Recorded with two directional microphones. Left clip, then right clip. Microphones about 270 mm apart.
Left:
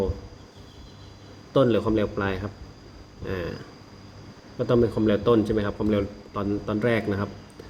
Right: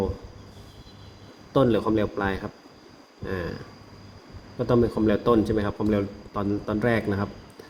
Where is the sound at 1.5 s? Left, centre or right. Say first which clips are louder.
Even; centre.